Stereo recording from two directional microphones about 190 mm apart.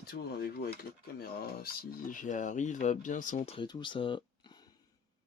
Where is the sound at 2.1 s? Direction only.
40° left (ahead or behind); by 4.6 s 25° left (ahead or behind).